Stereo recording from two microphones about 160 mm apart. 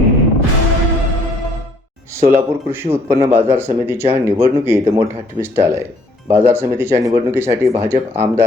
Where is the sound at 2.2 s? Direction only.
15° right (ahead or behind).